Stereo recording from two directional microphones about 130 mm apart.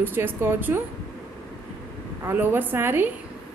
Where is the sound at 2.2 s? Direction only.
15° right (ahead or behind).